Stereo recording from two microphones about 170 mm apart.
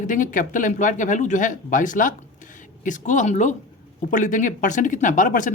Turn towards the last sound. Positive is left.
turn(degrees=50)  # may be behind; listen again after turning